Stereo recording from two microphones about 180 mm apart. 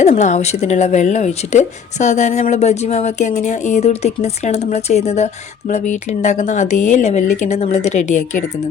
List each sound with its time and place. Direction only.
0.1 s speech: 40° left (ahead or behind)